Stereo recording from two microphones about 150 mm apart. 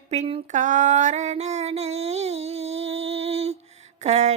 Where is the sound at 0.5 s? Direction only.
55° right (ahead or behind).